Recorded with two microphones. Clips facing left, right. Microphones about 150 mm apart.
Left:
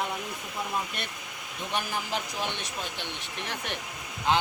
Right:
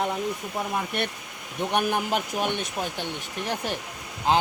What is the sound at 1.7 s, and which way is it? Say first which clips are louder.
Speech: right 7 dB; 60° right (ahead or behind).